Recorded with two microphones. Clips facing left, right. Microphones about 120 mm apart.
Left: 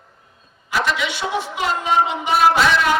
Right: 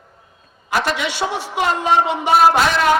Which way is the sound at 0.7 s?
50° right (ahead or behind).